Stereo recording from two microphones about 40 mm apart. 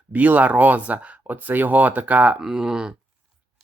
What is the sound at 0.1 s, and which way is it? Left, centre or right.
Speech, right.